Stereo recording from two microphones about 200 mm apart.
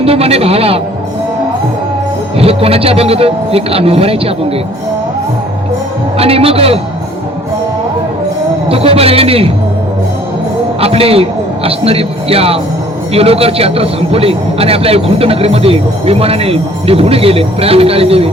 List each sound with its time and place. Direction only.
0.0 s speech: 30° right (ahead or behind)
2.4 s speech: 30° right (ahead or behind)
6.1 s speech: 30° right (ahead or behind)
8.7 s speech: 30° right (ahead or behind)
10.8 s speech: 30° right (ahead or behind)